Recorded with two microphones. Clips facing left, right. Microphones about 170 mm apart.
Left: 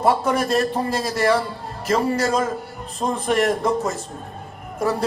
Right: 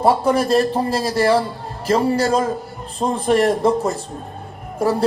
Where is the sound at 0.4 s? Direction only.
30° right (ahead or behind).